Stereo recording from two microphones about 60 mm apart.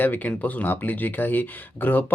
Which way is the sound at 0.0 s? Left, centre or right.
Left.